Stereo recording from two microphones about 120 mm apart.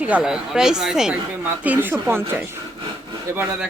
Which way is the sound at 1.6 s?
15° right (ahead or behind).